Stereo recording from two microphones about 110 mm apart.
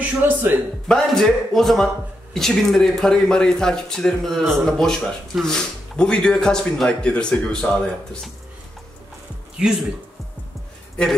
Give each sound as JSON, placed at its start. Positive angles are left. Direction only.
{"t": 0.0, "sound": "a man's voice", "side_deg": -15}
{"t": 0.8, "sound": "a man's voice", "side_deg": 5}
{"t": 9.6, "sound": "a man's voice", "side_deg": -5}